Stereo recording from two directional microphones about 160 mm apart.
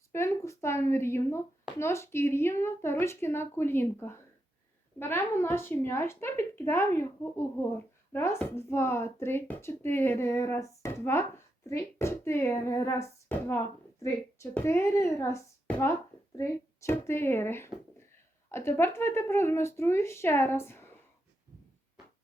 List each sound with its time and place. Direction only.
0.1 s speech: 15° left (ahead or behind)